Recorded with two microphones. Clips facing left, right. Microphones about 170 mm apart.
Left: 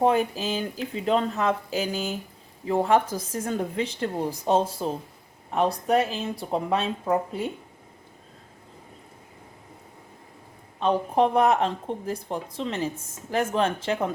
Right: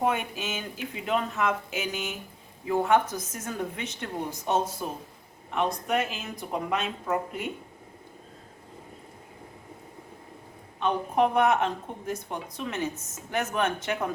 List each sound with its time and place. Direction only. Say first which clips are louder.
0.0 s speech: left 6 dB; 35° left (ahead or behind)
10.8 s speech: left 3 dB; 30° left (ahead or behind)